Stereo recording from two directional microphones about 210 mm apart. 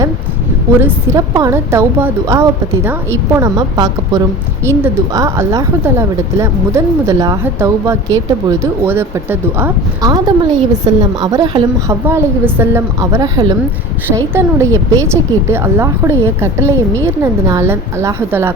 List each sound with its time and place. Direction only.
0.8 s speech: 15° right (ahead or behind)